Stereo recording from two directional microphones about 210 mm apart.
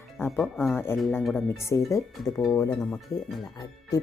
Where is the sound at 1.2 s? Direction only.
Centre (ahead or behind).